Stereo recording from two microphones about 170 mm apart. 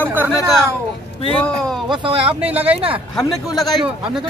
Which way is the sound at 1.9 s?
30° right (ahead or behind).